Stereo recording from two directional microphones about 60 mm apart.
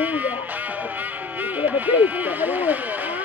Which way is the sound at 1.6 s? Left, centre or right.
Right.